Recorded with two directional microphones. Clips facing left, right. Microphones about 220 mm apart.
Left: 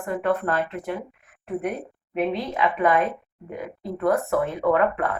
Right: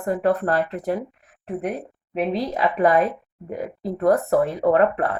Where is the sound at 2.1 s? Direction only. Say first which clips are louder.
Right 2 dB; 35° right (ahead or behind).